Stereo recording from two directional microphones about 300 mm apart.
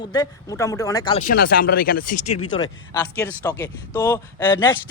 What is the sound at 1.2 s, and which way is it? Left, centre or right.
Speech, left.